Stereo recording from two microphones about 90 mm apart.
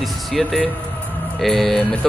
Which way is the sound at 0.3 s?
Centre (ahead or behind).